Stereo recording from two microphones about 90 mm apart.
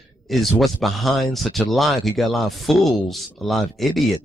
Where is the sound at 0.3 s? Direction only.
Centre (ahead or behind).